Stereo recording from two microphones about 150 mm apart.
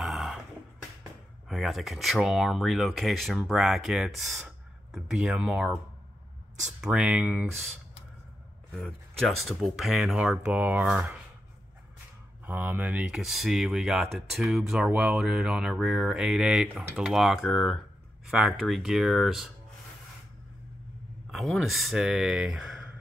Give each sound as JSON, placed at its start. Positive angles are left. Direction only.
{"t": 0.0, "sound": "a sound", "side_deg": 0}
{"t": 1.5, "sound": "speech", "side_deg": 0}
{"t": 6.8, "sound": "speech", "side_deg": -5}
{"t": 8.7, "sound": "speech", "side_deg": 0}
{"t": 12.4, "sound": "speech", "side_deg": -15}
{"t": 21.3, "sound": "speech", "side_deg": 0}